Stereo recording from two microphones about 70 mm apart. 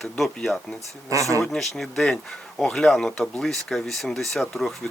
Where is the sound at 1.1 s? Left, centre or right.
Right.